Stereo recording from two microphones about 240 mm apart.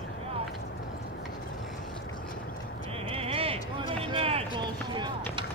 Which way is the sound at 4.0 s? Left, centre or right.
Right.